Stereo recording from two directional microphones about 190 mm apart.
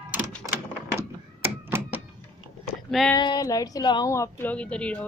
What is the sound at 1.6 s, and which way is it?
Thunk, 10° right (ahead or behind).